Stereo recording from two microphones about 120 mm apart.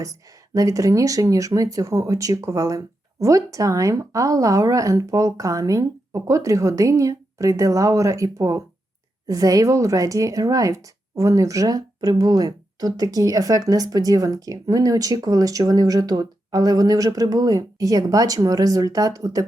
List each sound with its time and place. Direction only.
0.0 s speech: 30° right (ahead or behind)